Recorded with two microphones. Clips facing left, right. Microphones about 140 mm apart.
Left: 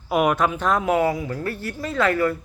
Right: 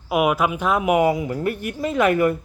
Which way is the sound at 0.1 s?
5° right (ahead or behind).